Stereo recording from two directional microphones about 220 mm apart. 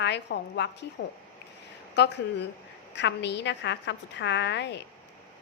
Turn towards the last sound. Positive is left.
turn(degrees=50)  # may be behind; listen again after turning